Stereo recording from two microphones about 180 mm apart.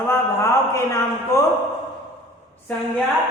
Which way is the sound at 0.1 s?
15° left (ahead or behind).